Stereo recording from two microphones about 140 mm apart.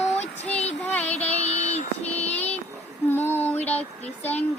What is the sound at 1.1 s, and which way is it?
Child singing, 50° left (ahead or behind).